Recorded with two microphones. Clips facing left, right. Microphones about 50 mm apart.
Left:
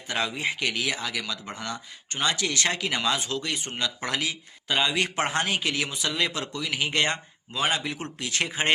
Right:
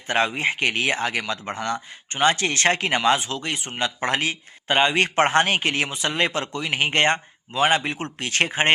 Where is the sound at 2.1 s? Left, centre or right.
Right.